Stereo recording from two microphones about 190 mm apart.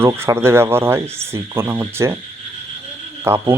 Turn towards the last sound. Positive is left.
turn(degrees=-10)  # may be behind; listen again after turning